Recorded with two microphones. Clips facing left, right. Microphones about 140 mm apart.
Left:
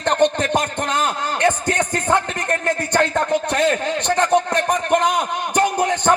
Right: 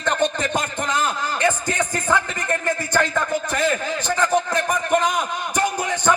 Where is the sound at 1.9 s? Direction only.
65° left (ahead or behind).